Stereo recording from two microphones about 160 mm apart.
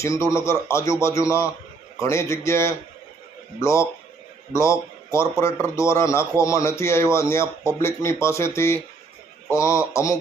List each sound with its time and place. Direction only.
0.0 s a man's voice: 20° left (ahead or behind)